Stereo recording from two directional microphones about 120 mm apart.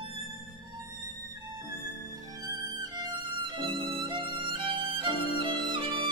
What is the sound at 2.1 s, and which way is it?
Violin, 30° right (ahead or behind).